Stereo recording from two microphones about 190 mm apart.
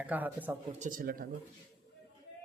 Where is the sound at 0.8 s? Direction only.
45° right (ahead or behind).